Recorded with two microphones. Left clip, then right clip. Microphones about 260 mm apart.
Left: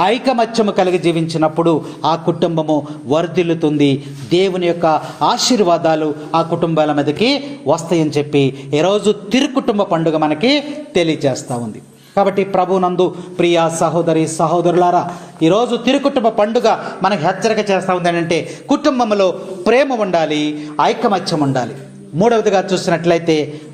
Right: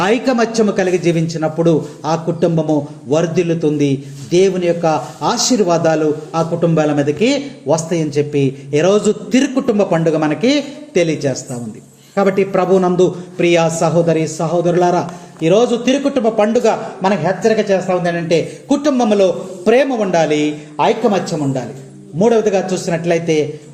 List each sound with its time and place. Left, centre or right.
0.0 s a man's voice: centre